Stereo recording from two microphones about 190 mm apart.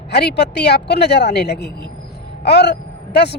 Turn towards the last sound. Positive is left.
turn(degrees=60)  # may be behind; listen again after turning